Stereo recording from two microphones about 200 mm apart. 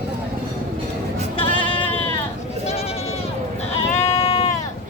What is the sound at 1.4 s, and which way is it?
Sheep, 25° left (ahead or behind).